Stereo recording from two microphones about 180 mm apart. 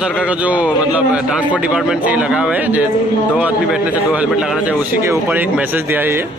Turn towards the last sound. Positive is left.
turn(degrees=-10)  # may be behind; listen again after turning